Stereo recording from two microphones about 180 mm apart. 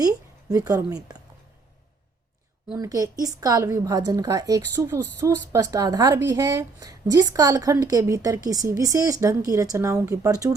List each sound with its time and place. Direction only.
0.0 s a woman's voice: 20° right (ahead or behind)
2.7 s a woman's voice: 20° right (ahead or behind)